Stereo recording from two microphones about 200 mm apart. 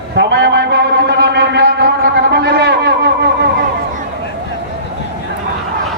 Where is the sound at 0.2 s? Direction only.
60° right (ahead or behind).